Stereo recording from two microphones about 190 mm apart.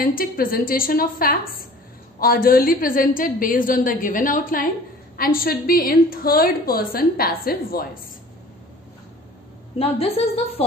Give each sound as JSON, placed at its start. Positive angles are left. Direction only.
{"t": 0.0, "sound": "a woman's voice", "side_deg": 50}
{"t": 9.8, "sound": "a woman's voice", "side_deg": 30}